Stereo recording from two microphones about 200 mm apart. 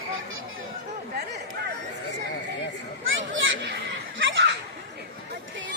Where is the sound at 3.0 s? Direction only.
75° right (ahead or behind).